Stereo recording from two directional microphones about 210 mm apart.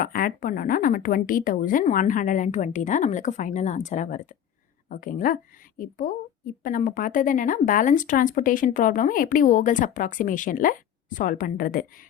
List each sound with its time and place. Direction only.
0.0 s a woman's voice: 40° left (ahead or behind)